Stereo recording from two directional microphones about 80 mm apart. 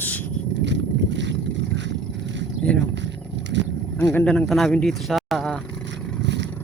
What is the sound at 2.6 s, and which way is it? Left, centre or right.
Speech, centre.